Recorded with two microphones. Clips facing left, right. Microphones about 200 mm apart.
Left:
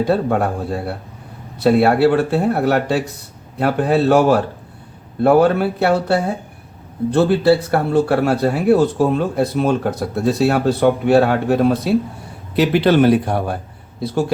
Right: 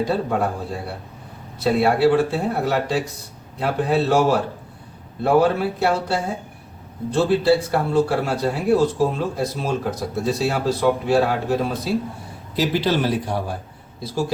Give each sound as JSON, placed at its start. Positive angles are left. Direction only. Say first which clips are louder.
{"t": 0.1, "sound": "speech", "louder": "left 5 dB", "side_deg": 60}